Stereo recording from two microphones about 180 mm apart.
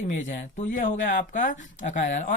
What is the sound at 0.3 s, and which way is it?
Speech, 45° left (ahead or behind).